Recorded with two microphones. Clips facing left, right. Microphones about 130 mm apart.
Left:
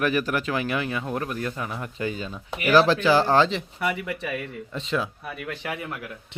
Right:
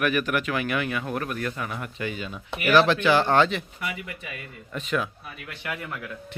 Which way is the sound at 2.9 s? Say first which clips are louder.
Left 1 dB; 35° left (ahead or behind).